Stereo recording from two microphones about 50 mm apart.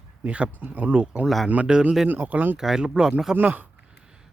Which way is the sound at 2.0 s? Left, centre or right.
Right.